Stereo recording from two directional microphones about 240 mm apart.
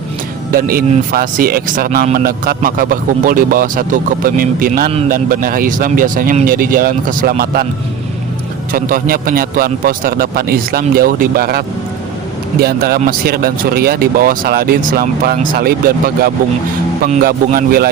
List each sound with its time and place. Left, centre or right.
0.5 s speech: right
8.7 s speech: right